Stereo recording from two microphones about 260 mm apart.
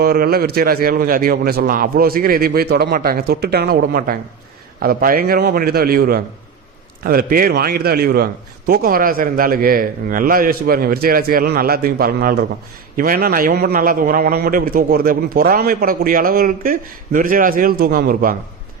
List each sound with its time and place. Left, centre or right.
0.0 s a man's voice: right